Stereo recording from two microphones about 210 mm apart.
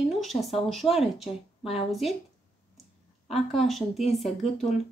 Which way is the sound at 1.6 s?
25° left (ahead or behind).